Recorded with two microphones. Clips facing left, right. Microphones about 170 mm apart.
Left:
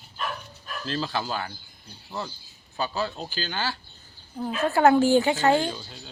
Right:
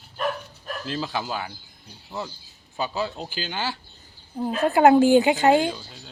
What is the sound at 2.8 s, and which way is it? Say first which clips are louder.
A woman's voice: right 1 dB; 20° right (ahead or behind).